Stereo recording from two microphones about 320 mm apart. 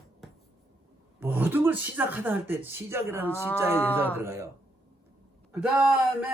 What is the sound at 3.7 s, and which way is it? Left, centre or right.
Speech, centre.